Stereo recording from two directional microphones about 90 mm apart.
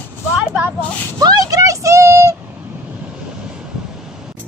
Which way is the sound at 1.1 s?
45° right (ahead or behind).